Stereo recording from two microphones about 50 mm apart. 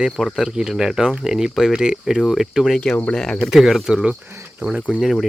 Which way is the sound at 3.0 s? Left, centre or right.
Centre.